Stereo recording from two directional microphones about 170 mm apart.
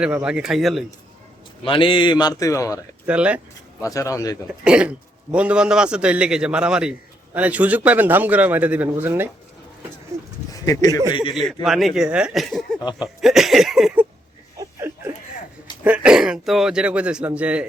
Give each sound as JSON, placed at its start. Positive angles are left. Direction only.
{"t": 0.0, "sound": "a man's voice", "side_deg": -5}
{"t": 1.6, "sound": "speech", "side_deg": 30}
{"t": 3.1, "sound": "a man's voice", "side_deg": -5}
{"t": 3.8, "sound": "speech", "side_deg": 20}
{"t": 4.4, "sound": "a man's voice", "side_deg": -5}
{"t": 10.5, "sound": "speech", "side_deg": 20}
{"t": 11.3, "sound": "a man's voice", "side_deg": 0}
{"t": 14.6, "sound": "a sound", "side_deg": -15}
{"t": 15.8, "sound": "a man's voice", "side_deg": -5}